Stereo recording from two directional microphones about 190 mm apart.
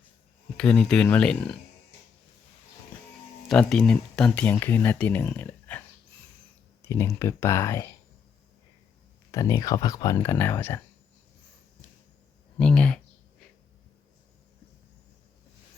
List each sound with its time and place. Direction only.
0.5 s speech: 5° left (ahead or behind)
3.5 s speech: centre (ahead or behind)
6.8 s speech: 15° left (ahead or behind)
9.3 s speech: 20° left (ahead or behind)
12.5 s speech: 5° left (ahead or behind)